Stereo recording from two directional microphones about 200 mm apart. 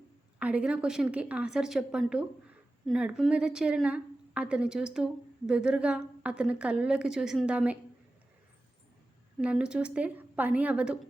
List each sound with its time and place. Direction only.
0.3 s a woman's voice: 5° right (ahead or behind)
9.4 s a woman's voice: 5° right (ahead or behind)